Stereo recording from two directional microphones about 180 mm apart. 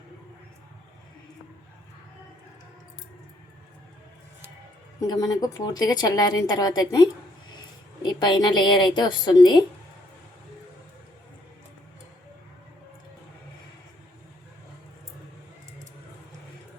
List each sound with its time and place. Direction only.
4.9 s a woman's voice: 20° left (ahead or behind)